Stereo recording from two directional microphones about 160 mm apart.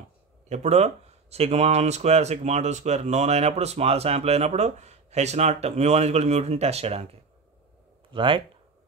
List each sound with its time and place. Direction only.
0.5 s speech: 45° right (ahead or behind)
8.1 s speech: 30° right (ahead or behind)